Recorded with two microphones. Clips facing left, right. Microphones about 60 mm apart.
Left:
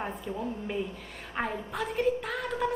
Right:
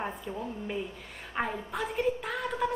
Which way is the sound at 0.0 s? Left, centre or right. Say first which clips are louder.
Left 1 dB; centre.